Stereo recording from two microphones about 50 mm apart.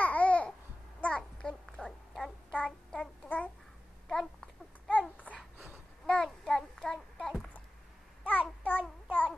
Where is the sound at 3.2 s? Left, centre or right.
Left.